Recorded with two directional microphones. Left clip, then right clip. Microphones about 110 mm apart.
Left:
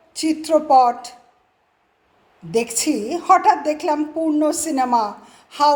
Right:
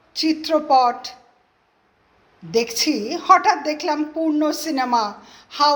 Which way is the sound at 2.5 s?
35° left (ahead or behind).